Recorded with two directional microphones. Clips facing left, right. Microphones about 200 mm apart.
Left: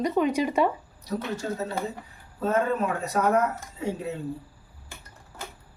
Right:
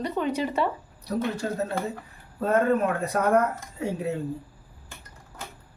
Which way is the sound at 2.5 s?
55° right (ahead or behind).